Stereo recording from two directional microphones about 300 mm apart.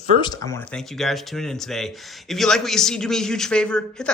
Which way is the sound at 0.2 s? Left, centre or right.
Centre.